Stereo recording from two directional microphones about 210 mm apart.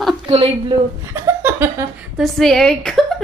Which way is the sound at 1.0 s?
10° right (ahead or behind).